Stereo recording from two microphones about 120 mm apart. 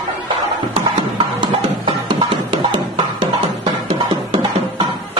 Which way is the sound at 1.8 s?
45° right (ahead or behind).